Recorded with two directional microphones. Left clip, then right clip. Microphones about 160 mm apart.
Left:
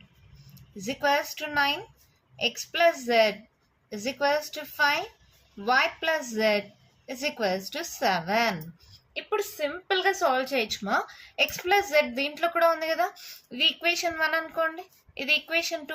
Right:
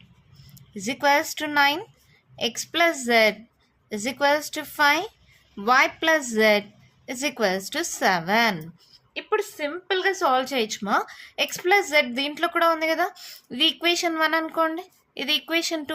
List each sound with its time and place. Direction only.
0.5 s a woman's voice: 50° right (ahead or behind)
9.6 s a woman's voice: 25° right (ahead or behind); by 15.8 s 50° right (ahead or behind)